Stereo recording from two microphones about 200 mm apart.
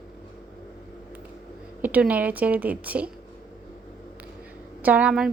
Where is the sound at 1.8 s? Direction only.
5° right (ahead or behind).